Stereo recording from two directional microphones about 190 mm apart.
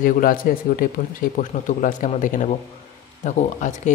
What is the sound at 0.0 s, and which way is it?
A man's voice, 45° left (ahead or behind).